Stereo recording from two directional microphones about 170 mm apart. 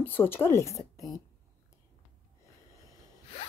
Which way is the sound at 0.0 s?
10° left (ahead or behind).